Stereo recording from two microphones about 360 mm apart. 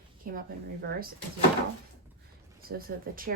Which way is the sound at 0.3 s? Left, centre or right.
Right.